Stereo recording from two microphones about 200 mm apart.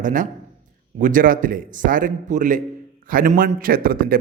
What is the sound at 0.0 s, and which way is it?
A man's voice, 40° right (ahead or behind).